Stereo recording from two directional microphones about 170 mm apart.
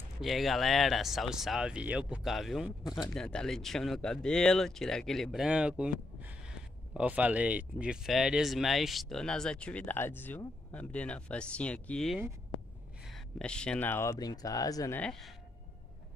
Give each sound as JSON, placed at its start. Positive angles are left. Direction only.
{"t": 0.2, "sound": "speech", "side_deg": 0}
{"t": 15.0, "sound": "speech", "side_deg": 5}